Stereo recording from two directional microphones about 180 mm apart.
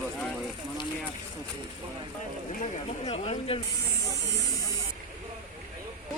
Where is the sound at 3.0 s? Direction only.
35° left (ahead or behind).